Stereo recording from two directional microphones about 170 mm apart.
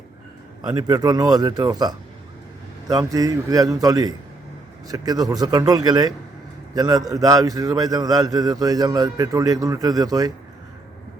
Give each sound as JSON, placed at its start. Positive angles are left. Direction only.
{"t": 0.6, "sound": "a man's voice", "side_deg": -25}